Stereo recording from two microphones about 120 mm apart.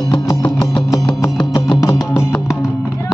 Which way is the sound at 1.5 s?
35° left (ahead or behind).